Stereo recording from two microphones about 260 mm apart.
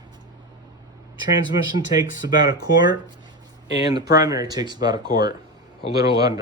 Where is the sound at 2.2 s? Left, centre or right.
Centre.